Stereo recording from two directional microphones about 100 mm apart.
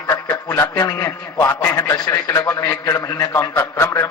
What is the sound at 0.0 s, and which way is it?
Music, 35° left (ahead or behind).